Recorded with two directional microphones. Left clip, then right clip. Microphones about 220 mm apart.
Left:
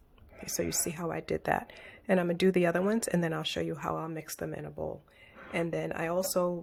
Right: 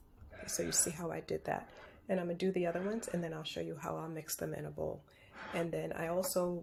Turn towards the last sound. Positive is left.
turn(degrees=30)  # may be behind; listen again after turning